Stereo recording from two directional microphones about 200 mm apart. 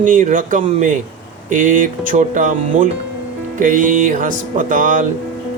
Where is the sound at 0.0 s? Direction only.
40° right (ahead or behind).